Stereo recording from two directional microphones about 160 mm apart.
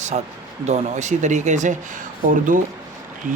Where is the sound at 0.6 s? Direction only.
45° right (ahead or behind).